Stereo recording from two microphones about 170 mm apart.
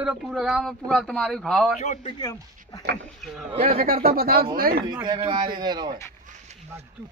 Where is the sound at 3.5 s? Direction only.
35° right (ahead or behind).